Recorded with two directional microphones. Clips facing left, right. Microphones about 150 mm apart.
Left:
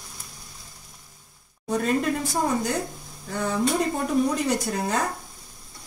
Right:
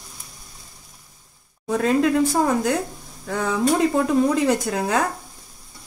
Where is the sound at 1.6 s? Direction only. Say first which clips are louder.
Right 5 dB; 90° right.